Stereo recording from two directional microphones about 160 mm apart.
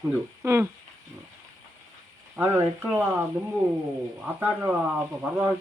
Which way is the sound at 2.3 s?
15° right (ahead or behind).